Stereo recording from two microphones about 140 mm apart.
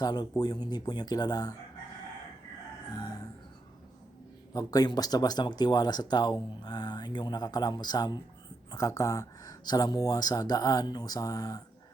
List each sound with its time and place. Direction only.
0.0 s speech: 30° left (ahead or behind)
2.9 s chicken: 25° left (ahead or behind)
4.5 s speech: 25° left (ahead or behind)